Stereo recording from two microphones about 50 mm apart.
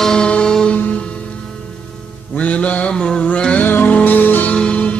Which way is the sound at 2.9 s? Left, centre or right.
Centre.